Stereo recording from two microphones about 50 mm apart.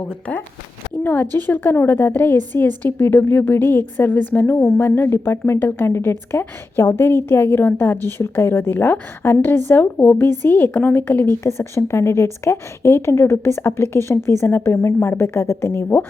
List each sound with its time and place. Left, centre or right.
1.0 s a woman's voice: left
4.8 s a woman's voice: left
7.3 s a woman's voice: left
11.4 s a woman's voice: left
13.3 s a woman's voice: left
14.4 s a woman's voice: left
14.7 s a woman's voice: left